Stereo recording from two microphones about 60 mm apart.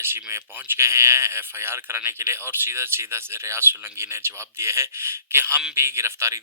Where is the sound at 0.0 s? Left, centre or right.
Right.